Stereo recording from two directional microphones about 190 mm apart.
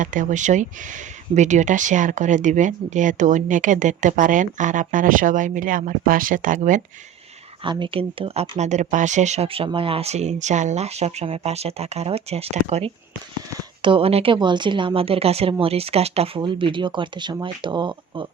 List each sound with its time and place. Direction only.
0.0 s speech: 40° right (ahead or behind)
7.6 s speech: 25° right (ahead or behind)